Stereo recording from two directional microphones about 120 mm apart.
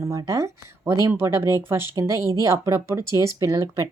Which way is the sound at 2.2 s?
30° left (ahead or behind).